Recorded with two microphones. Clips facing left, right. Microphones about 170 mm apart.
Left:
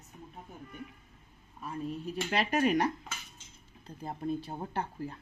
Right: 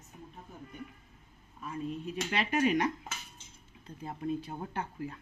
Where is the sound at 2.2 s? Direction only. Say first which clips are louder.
Left 1 dB; 45° left (ahead or behind).